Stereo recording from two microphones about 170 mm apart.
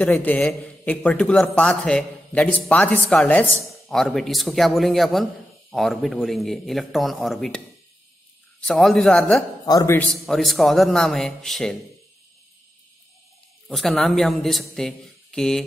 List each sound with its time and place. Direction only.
0.0 s a man's voice: 10° left (ahead or behind)
9.7 s a man's voice: 20° left (ahead or behind)
9.9 s speech: centre (ahead or behind)
13.7 s speech: centre (ahead or behind)